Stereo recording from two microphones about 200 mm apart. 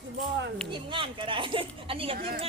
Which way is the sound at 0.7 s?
25° right (ahead or behind).